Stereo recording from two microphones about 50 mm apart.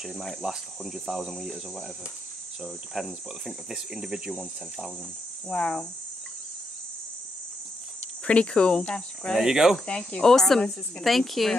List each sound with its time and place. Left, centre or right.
0.0 s cricket: centre
5.5 s speech: centre
8.3 s speech: centre
9.4 s cricket: centre
9.8 s speech: centre
11.1 s cricket: centre